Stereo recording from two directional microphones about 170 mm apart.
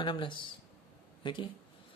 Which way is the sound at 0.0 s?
30° left (ahead or behind).